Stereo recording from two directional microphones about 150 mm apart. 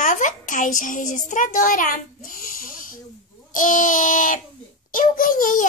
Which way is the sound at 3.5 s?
60° left (ahead or behind).